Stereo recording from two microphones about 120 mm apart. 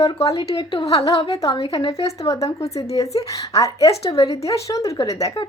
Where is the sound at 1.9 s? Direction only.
30° left (ahead or behind).